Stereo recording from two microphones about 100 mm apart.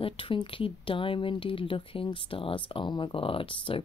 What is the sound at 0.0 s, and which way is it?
Speech, 60° left (ahead or behind).